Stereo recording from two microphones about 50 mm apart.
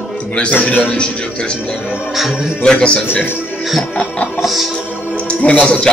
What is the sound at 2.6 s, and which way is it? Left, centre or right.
Speech, centre.